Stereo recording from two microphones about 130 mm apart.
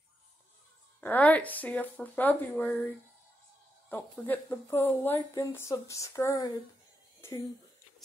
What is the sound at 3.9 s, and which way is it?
Speech, 15° left (ahead or behind).